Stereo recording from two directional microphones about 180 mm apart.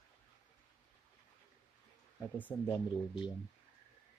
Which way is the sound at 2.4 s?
10° left (ahead or behind).